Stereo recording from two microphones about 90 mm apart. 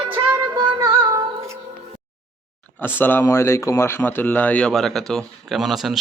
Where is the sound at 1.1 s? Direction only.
35° right (ahead or behind).